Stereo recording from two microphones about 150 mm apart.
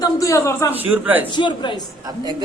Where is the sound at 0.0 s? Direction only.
20° left (ahead or behind).